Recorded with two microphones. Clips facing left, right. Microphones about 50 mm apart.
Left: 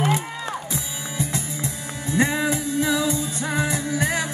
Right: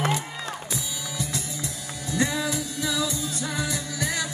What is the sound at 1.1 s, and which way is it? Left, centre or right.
Music, left.